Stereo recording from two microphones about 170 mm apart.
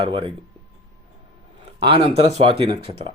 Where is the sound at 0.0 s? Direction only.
30° right (ahead or behind).